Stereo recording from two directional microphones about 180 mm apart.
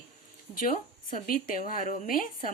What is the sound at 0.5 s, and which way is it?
Speech, 45° left (ahead or behind).